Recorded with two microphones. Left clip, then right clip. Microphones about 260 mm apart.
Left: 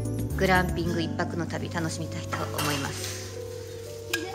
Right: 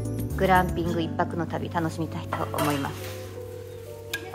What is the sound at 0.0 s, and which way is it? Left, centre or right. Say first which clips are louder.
A woman's voice: right 1 dB; centre.